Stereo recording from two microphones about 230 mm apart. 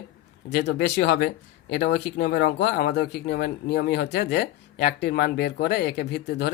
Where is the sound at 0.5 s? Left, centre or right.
Left.